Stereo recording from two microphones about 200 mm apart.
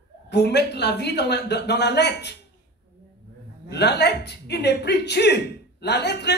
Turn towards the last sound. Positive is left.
turn(degrees=55)  # may be behind; listen again after turning